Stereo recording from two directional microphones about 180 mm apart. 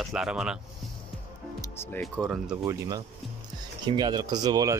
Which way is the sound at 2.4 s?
20° right (ahead or behind).